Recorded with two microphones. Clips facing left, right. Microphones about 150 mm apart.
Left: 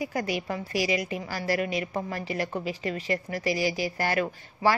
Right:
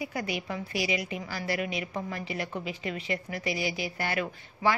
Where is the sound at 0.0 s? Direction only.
45° left (ahead or behind).